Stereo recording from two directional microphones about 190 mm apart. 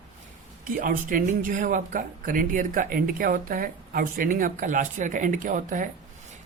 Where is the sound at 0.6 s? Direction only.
45° right (ahead or behind).